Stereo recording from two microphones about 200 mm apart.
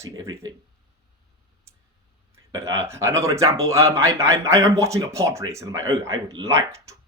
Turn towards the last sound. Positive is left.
turn(degrees=-15)  # may be behind; listen again after turning